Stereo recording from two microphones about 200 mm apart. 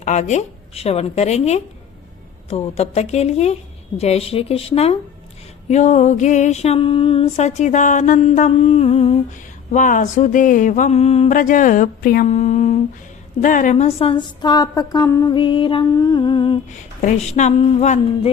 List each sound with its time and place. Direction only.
0.0 s music: 35° left (ahead or behind)
13.4 s a woman's voice: 40° left (ahead or behind); by 16.6 s 25° left (ahead or behind)
17.0 s music: 35° left (ahead or behind)